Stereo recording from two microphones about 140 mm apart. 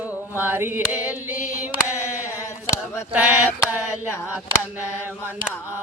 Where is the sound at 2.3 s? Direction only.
20° left (ahead or behind).